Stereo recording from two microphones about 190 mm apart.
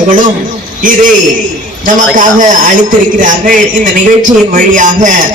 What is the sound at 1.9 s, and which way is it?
A man's voice, 45° right (ahead or behind).